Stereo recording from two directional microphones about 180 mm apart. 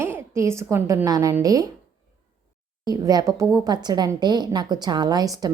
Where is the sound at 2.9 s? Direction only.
20° right (ahead or behind).